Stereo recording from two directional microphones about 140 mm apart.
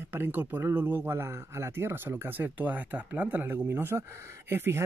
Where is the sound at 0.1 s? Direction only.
15° right (ahead or behind).